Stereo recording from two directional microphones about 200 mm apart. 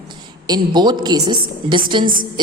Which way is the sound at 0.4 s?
20° right (ahead or behind).